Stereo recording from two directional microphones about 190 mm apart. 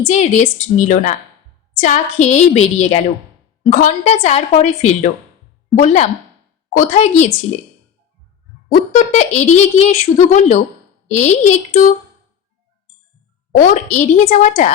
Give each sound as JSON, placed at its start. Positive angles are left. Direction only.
{"t": 0.1, "sound": "a woman's voice", "side_deg": 40}
{"t": 8.7, "sound": "a woman's voice", "side_deg": 40}
{"t": 13.6, "sound": "a woman's voice", "side_deg": 40}